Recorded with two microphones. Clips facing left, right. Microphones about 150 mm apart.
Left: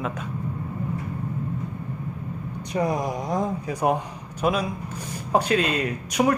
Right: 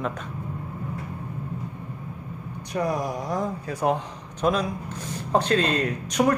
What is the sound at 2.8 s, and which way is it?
A man's voice, 20° left (ahead or behind).